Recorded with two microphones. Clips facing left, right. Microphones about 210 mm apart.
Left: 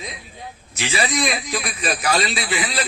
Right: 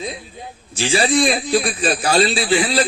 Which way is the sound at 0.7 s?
30° right (ahead or behind).